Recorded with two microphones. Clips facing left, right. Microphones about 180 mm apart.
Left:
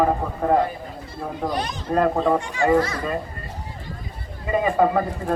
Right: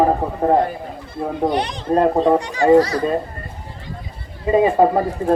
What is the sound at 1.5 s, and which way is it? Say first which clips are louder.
Speech: right 4 dB; 30° right (ahead or behind).